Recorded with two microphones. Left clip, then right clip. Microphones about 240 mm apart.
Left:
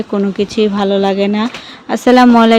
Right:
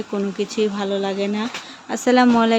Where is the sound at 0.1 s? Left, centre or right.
Left.